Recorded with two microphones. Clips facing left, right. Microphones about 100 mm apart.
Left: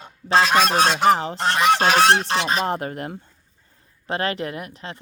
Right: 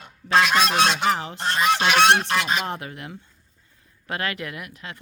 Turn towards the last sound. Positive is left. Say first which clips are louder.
# left 4 dB
turn(degrees=30)  # may be behind; listen again after turning